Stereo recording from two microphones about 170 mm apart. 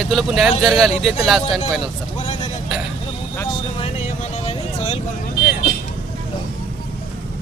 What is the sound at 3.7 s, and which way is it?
Vehicle, 40° left (ahead or behind).